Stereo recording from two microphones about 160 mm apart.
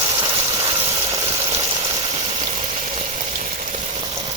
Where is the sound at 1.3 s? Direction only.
35° right (ahead or behind).